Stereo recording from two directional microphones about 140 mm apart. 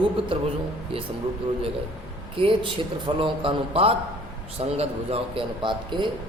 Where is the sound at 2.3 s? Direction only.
40° right (ahead or behind).